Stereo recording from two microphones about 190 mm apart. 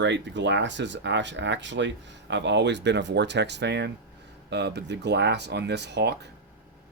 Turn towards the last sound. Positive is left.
turn(degrees=-65)  # may be behind; listen again after turning